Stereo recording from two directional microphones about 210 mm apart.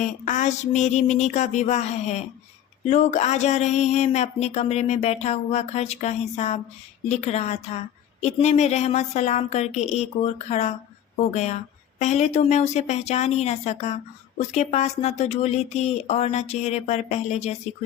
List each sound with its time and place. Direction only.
0.3 s a woman's voice: 35° left (ahead or behind)
11.9 s a woman's voice: 30° left (ahead or behind)